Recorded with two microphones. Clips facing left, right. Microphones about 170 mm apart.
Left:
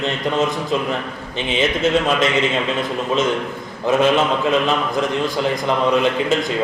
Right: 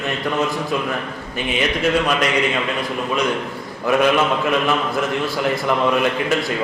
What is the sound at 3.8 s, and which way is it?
Speech, 20° left (ahead or behind).